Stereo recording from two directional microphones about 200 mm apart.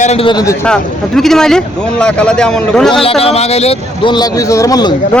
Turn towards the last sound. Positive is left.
turn(degrees=20)  # may be behind; listen again after turning